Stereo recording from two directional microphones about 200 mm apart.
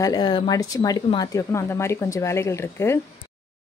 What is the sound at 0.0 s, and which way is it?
Speech, 20° left (ahead or behind).